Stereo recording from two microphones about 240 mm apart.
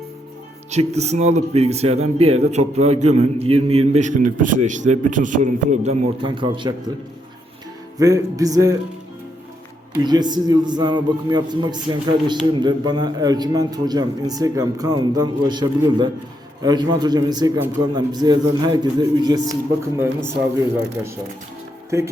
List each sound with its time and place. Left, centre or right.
0.7 s speech: right
7.9 s a man's voice: centre
10.0 s a man's voice: centre
21.8 s speech: centre